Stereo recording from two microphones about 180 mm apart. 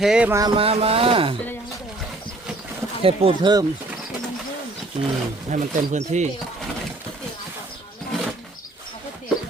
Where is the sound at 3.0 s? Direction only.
30° right (ahead or behind).